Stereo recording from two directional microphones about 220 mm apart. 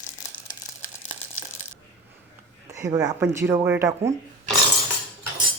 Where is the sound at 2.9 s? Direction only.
15° right (ahead or behind).